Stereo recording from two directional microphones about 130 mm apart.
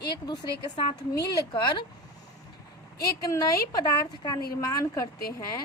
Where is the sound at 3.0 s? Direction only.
25° left (ahead or behind).